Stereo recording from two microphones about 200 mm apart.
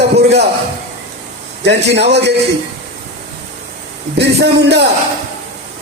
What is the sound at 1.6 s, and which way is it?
Speech, 60° right (ahead or behind).